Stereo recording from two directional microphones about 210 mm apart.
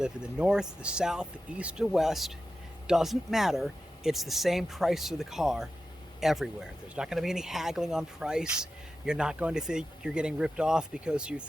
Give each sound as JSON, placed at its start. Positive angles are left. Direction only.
{"t": 0.0, "sound": "speech", "side_deg": -5}